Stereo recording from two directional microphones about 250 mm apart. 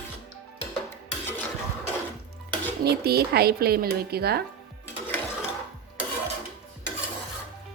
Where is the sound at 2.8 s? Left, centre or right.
Right.